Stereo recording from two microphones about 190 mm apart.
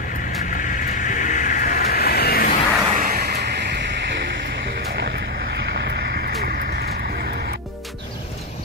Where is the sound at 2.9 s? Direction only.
45° right (ahead or behind); by 4.1 s 60° right (ahead or behind).